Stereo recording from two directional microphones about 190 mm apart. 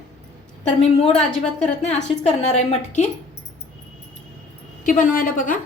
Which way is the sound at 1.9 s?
35° left (ahead or behind).